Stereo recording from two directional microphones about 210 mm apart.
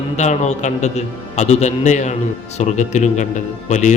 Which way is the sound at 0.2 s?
35° left (ahead or behind).